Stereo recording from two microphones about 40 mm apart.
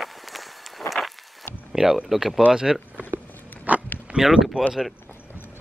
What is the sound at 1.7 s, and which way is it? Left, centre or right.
Speech, centre.